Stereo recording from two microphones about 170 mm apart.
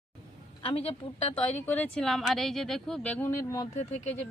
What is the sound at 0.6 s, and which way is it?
Speech, 35° left (ahead or behind).